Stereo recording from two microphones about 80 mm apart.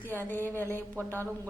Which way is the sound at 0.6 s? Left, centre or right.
Right.